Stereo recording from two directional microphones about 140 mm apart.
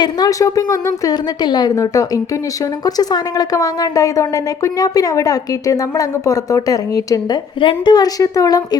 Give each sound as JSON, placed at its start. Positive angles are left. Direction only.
{"t": 0.0, "sound": "a woman's voice", "side_deg": 25}